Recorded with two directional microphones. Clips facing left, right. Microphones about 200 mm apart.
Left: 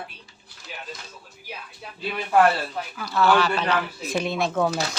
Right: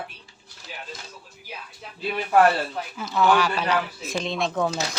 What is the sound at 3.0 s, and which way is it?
Speech, 20° right (ahead or behind).